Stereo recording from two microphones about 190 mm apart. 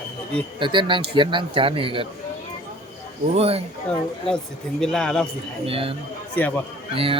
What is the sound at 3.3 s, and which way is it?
Speech, 30° right (ahead or behind).